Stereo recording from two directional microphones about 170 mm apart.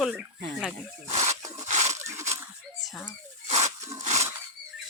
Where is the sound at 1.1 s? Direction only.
40° right (ahead or behind).